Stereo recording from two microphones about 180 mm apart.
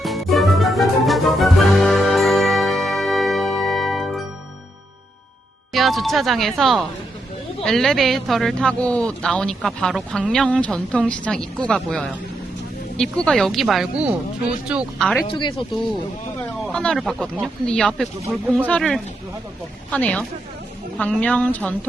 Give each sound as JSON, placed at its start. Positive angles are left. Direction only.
{"t": 0.0, "sound": "music", "side_deg": 0}
{"t": 5.7, "sound": "a man's voice", "side_deg": 0}
{"t": 15.3, "sound": "speech", "side_deg": 25}
{"t": 16.6, "sound": "a man's voice", "side_deg": 5}